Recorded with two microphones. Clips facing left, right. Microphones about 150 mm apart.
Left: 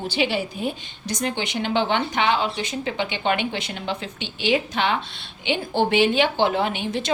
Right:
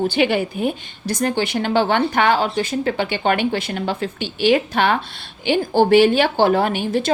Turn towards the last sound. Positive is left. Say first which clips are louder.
# right 5 dB
turn(degrees=-50)  # may be behind; listen again after turning